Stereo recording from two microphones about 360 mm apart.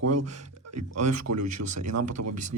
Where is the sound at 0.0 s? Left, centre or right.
Right.